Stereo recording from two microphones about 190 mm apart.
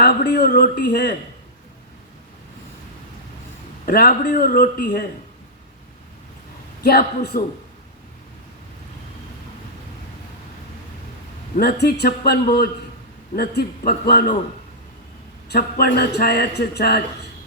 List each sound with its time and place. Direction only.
0.0 s a man's voice: 60° left (ahead or behind)
3.8 s a man's voice: 55° left (ahead or behind)
6.8 s a man's voice: 55° left (ahead or behind)
11.5 s a man's voice: 55° left (ahead or behind)
15.4 s a man's voice: 55° left (ahead or behind)